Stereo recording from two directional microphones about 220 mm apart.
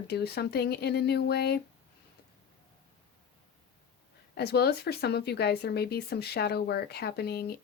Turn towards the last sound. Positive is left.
turn(degrees=45)  # may be behind; listen again after turning